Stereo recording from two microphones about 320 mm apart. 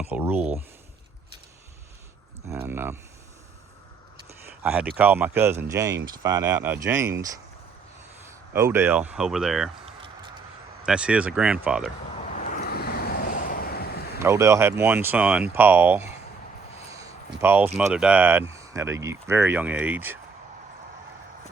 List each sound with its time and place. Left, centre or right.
0.0 s a sound: centre
2.5 s speech: centre
4.6 s speech: centre
8.3 s speech: centre
10.8 s speech: centre
12.3 s vehicle: left
14.2 s speech: centre
17.0 s a sound: centre
17.7 s speech: centre